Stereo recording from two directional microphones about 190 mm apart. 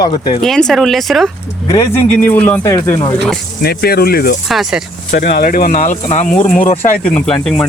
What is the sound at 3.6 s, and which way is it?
Speech, 55° left (ahead or behind).